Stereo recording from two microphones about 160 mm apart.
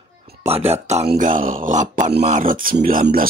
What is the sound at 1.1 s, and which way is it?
Speech, 55° right (ahead or behind).